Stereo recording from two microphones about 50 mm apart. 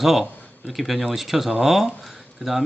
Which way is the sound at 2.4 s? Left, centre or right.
Centre.